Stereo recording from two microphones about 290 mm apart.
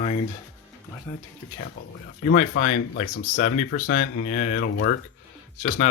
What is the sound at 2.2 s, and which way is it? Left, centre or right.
Speech, left.